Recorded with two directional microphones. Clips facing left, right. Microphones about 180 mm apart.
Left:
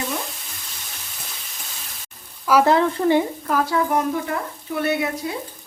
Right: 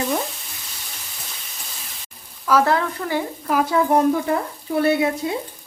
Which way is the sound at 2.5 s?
10° left (ahead or behind).